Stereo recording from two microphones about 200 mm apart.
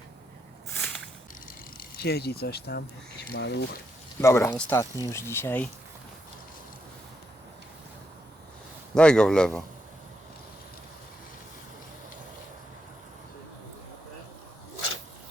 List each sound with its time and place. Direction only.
1.8 s speech: 50° left (ahead or behind)
4.2 s speech: 15° left (ahead or behind)
9.0 s speech: 5° left (ahead or behind)